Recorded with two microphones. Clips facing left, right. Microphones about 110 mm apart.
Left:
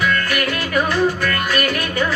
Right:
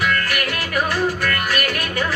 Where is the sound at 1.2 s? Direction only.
30° left (ahead or behind).